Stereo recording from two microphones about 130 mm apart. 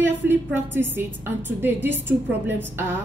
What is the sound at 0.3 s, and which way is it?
A woman's voice, 15° right (ahead or behind).